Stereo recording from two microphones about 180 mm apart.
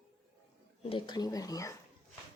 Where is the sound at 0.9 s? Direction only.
20° left (ahead or behind).